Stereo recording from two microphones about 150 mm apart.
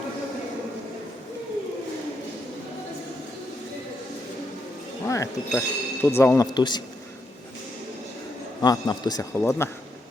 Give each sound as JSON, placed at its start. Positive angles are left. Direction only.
{"t": 5.0, "sound": "speech", "side_deg": 20}
{"t": 8.6, "sound": "a man's voice", "side_deg": 25}